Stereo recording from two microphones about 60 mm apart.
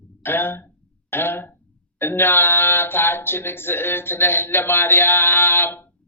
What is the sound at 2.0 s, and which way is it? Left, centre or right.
Speech, left.